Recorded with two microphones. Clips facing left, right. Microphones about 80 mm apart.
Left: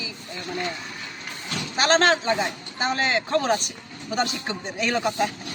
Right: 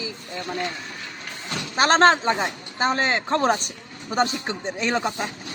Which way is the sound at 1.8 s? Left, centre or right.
Right.